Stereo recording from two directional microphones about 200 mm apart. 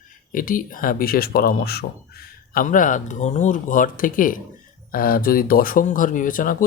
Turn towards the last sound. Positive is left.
turn(degrees=45)  # may be behind; listen again after turning